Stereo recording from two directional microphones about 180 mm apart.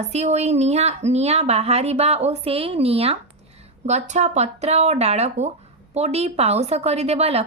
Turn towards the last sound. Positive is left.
turn(degrees=-35)  # may be behind; listen again after turning